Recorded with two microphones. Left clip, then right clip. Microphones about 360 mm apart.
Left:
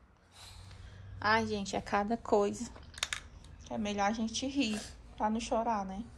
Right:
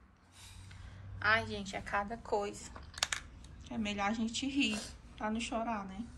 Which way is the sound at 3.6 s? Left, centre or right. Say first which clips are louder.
Left 3 dB; centre.